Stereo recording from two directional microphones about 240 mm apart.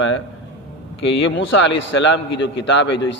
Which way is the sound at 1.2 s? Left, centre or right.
Left.